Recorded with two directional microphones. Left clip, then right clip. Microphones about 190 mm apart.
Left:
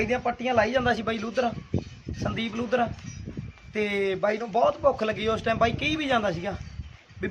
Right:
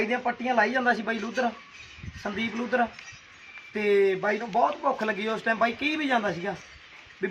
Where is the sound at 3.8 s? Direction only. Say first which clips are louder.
Right 3 dB; 30° left (ahead or behind).